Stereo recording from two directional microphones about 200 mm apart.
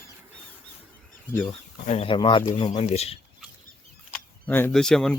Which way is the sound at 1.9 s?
30° left (ahead or behind).